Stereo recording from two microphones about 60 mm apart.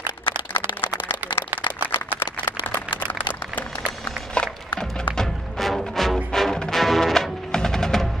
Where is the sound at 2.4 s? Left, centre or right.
Left.